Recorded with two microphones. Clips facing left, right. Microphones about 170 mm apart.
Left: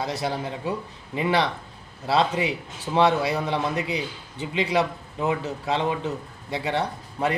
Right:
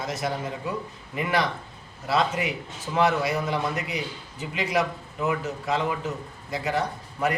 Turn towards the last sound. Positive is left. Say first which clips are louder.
# left 1 dB
turn(degrees=30)  # may be behind; listen again after turning